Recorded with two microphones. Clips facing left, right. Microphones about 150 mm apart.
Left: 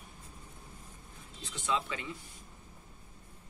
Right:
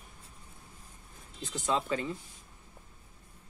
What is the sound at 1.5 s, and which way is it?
Speech, 40° right (ahead or behind).